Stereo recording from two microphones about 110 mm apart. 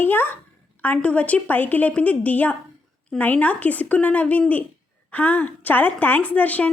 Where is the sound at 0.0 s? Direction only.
20° left (ahead or behind).